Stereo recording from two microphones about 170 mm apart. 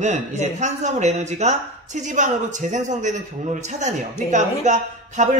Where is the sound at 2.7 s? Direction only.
45° right (ahead or behind).